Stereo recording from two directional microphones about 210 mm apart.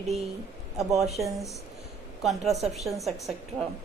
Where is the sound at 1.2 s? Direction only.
Centre (ahead or behind).